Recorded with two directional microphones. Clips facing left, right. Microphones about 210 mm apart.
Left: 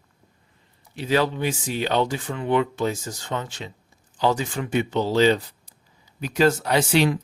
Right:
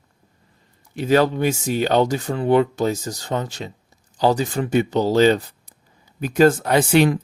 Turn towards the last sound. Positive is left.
turn(degrees=-55)  # may be behind; listen again after turning